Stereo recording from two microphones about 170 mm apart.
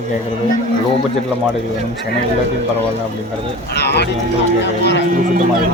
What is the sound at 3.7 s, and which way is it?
Speech, 75° left (ahead or behind).